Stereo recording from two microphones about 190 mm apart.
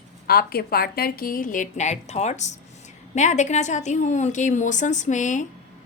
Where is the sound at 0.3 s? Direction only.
55° left (ahead or behind).